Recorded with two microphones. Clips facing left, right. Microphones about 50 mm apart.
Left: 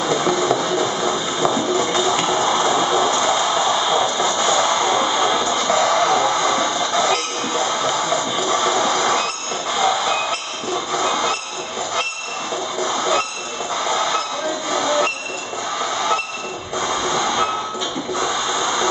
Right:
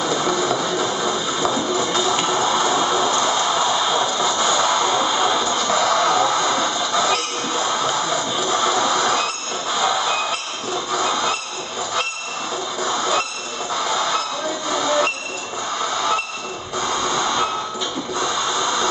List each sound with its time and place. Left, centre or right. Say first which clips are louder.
0.0 s music: left 2 dB; centre
9.8 s train: left 2 dB; centre
12.8 s train: left 1 dB; centre
16.7 s music: left 1 dB; centre
18.2 s a sound: even; centre